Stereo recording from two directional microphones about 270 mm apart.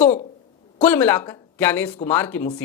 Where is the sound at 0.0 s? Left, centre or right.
Left.